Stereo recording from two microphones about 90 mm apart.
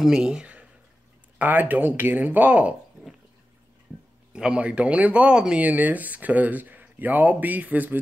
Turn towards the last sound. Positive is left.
turn(degrees=-20)  # may be behind; listen again after turning